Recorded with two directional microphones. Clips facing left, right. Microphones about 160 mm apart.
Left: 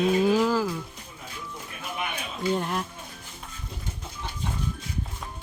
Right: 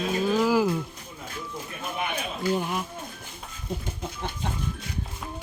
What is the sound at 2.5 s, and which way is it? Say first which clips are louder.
Speech: even; 5° right (ahead or behind).